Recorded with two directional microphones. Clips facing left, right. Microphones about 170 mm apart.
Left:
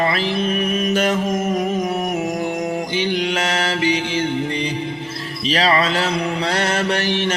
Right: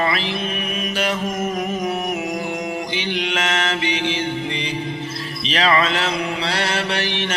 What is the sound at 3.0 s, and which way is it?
Mantra, 40° left (ahead or behind).